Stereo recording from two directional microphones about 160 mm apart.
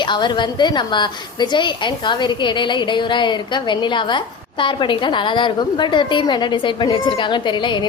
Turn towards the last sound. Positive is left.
turn(degrees=30)  # may be behind; listen again after turning